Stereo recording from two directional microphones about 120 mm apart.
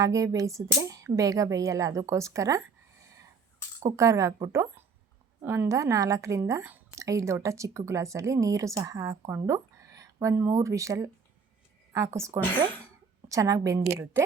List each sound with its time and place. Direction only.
0.0 s a woman's voice: 30° right (ahead or behind)